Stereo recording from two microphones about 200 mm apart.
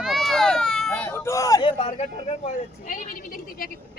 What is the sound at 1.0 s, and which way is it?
Vehicle, 15° left (ahead or behind).